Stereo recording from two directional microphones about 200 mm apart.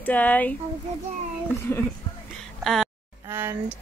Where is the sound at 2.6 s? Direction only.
Centre (ahead or behind).